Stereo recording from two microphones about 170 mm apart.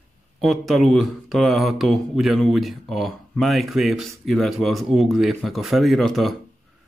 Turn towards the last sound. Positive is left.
turn(degrees=0)  # may be behind; listen again after turning